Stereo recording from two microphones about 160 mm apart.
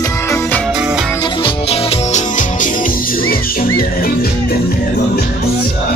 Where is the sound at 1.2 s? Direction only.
30° left (ahead or behind); by 4.5 s 65° left (ahead or behind).